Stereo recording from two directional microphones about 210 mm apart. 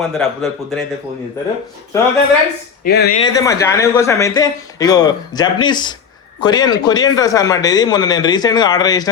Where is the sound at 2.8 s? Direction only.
50° left (ahead or behind).